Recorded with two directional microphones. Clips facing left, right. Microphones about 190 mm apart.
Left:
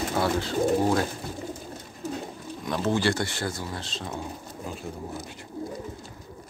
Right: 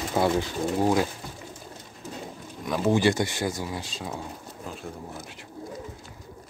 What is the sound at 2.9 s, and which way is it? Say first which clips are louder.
Speech: right 4 dB; 15° right (ahead or behind).